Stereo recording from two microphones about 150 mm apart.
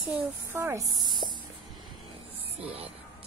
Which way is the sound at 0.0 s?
10° right (ahead or behind).